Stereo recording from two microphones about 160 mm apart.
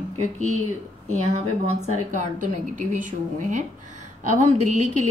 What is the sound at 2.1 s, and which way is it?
Speech, 50° right (ahead or behind).